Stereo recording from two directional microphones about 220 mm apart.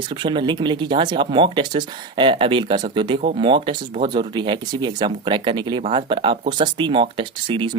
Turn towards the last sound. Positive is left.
turn(degrees=-20)  # may be behind; listen again after turning